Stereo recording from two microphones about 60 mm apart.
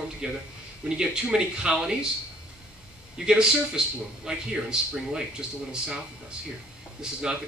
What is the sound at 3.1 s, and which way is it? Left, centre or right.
Speech, centre.